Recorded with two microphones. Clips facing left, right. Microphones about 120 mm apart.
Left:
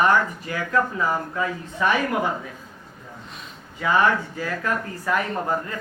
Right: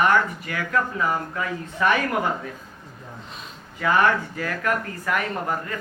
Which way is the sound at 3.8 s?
20° left (ahead or behind).